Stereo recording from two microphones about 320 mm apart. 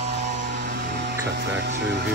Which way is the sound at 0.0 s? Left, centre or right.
Right.